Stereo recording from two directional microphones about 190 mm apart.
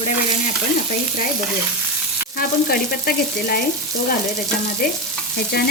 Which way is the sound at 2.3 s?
50° left (ahead or behind).